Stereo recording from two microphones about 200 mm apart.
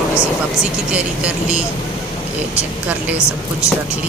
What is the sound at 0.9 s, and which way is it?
Speech, 5° right (ahead or behind).